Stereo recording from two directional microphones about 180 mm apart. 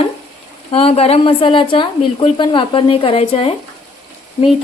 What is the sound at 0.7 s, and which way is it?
Speech, 30° left (ahead or behind).